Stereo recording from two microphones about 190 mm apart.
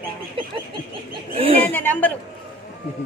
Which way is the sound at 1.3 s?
30° right (ahead or behind).